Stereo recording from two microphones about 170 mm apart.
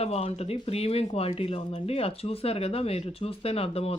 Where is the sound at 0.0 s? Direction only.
35° left (ahead or behind).